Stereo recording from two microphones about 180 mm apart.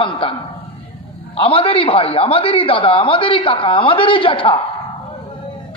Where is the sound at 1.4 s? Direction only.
30° left (ahead or behind).